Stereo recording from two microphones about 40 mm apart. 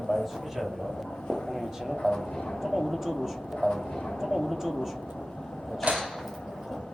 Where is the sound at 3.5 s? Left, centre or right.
Centre.